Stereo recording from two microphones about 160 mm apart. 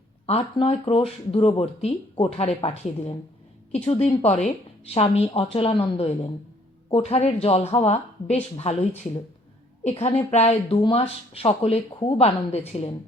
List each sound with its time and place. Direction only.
0.5 s speech: 40° left (ahead or behind)